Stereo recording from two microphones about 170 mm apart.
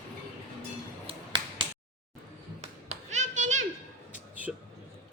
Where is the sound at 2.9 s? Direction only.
45° right (ahead or behind).